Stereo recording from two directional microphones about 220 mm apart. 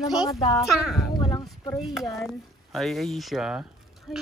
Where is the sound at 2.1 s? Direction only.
Centre (ahead or behind).